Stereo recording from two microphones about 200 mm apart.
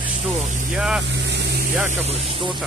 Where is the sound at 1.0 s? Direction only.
60° right (ahead or behind).